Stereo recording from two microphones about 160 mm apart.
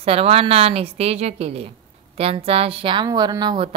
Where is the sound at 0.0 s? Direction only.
40° right (ahead or behind).